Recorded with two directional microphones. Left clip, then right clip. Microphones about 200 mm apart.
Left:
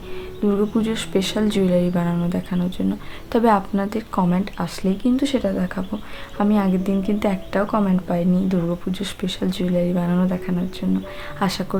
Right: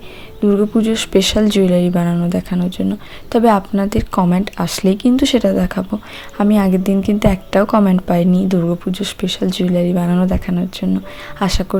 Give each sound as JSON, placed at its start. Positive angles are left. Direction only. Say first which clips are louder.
{"t": 0.4, "sound": "speech", "louder": "right 6 dB", "side_deg": -25}